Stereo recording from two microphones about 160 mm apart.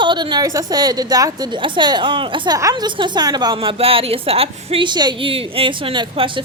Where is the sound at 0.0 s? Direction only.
30° right (ahead or behind).